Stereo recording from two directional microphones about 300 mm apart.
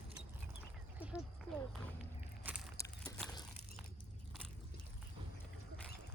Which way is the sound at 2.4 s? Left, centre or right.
Centre.